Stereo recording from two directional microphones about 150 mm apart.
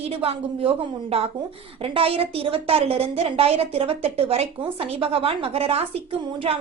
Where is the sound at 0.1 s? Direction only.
40° right (ahead or behind).